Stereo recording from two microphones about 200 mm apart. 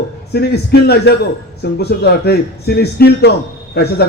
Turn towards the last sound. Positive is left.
turn(degrees=55)  # may be behind; listen again after turning